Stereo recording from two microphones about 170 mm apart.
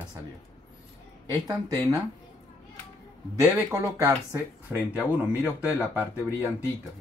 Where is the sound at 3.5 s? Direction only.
20° right (ahead or behind).